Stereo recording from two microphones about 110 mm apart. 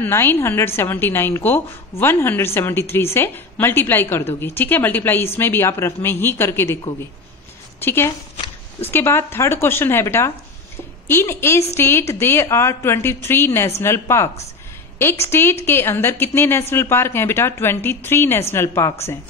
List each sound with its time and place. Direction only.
0.0 s a woman's voice: 20° left (ahead or behind)
7.8 s a woman's voice: 20° left (ahead or behind)